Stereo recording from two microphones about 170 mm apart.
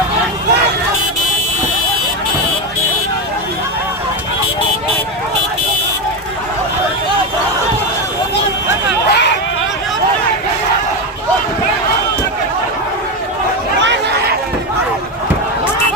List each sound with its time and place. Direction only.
9.0 s hubbub: 85° left